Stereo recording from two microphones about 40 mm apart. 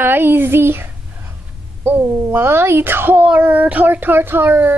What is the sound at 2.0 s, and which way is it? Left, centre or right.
A child's voice, right.